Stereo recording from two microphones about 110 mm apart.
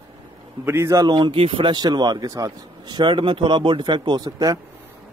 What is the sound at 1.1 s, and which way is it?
Speech, 50° right (ahead or behind).